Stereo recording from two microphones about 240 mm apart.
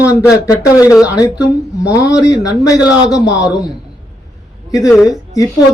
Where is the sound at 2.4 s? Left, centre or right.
Centre.